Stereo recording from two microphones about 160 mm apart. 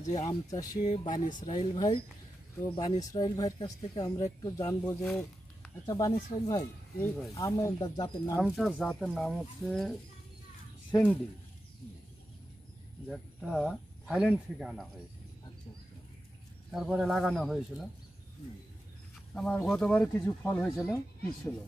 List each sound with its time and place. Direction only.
0.3 s speech: 25° left (ahead or behind)
0.7 s speech: 45° left (ahead or behind)
1.0 s speech: 30° left (ahead or behind)
7.0 s speech: centre (ahead or behind)
7.3 s speech: 20° left (ahead or behind)
8.4 s speech: centre (ahead or behind)
13.1 s speech: centre (ahead or behind)
16.7 s speech: centre (ahead or behind)
19.3 s speech: 5° left (ahead or behind)